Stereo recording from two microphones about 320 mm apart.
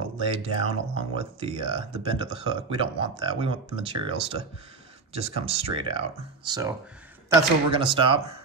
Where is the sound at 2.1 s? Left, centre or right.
Centre.